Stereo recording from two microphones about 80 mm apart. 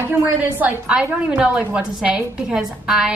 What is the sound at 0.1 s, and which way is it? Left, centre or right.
A woman's voice, right.